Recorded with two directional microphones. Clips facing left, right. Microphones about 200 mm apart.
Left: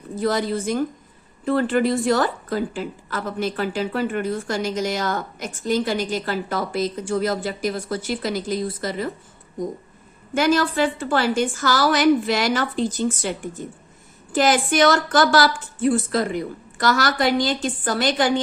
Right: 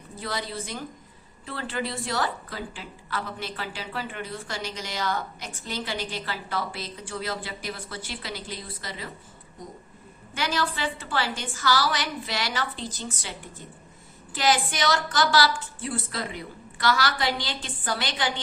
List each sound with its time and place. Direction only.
0.2 s a woman's voice: 45° left (ahead or behind)
10.3 s a woman's voice: 45° left (ahead or behind)